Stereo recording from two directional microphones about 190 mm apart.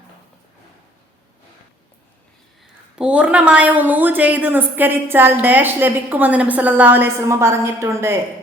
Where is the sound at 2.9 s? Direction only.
5° right (ahead or behind).